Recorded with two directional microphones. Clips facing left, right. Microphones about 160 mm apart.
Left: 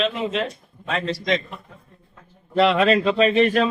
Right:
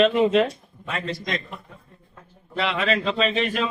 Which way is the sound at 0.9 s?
90° left.